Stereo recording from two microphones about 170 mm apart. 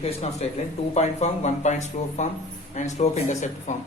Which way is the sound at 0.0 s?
40° left (ahead or behind).